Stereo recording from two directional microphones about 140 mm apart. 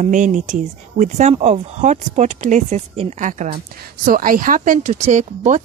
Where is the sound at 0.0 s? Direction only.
65° right (ahead or behind).